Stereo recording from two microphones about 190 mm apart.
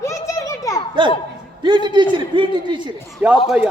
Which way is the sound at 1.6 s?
25° right (ahead or behind).